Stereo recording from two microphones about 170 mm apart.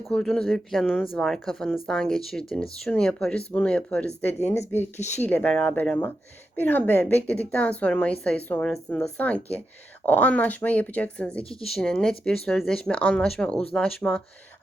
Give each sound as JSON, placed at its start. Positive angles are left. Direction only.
{"t": 0.0, "sound": "speech", "side_deg": 5}
{"t": 4.9, "sound": "speech", "side_deg": 40}
{"t": 5.2, "sound": "speech", "side_deg": 10}